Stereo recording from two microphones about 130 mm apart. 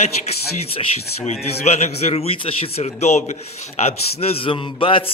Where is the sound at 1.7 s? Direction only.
50° left (ahead or behind).